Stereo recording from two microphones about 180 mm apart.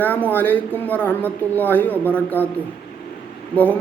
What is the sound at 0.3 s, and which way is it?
Speech, 10° left (ahead or behind).